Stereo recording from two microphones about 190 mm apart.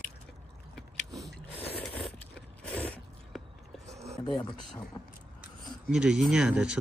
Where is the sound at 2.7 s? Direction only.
5° left (ahead or behind).